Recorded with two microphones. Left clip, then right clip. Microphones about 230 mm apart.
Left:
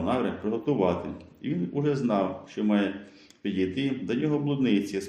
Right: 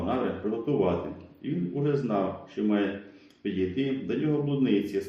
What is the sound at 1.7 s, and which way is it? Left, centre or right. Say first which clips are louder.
Speech: left 1 dB; left.